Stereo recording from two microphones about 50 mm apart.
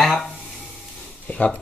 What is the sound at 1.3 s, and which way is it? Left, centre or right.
Speech, left.